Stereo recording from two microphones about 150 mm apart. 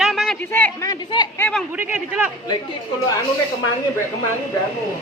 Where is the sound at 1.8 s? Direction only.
10° right (ahead or behind).